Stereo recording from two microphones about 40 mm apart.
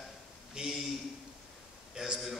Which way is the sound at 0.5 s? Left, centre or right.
Centre.